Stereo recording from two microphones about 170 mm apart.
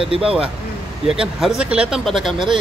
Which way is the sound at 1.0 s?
5° right (ahead or behind).